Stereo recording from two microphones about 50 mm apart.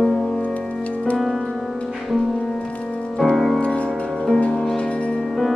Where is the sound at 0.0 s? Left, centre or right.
Centre.